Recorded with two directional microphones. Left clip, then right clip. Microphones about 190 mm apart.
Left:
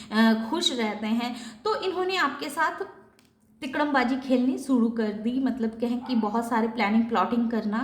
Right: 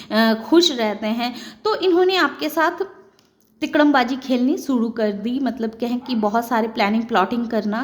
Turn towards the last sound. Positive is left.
turn(degrees=-45)  # may be behind; listen again after turning